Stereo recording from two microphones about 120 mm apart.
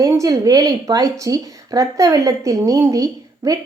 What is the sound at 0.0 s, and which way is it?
A woman's voice, 25° right (ahead or behind).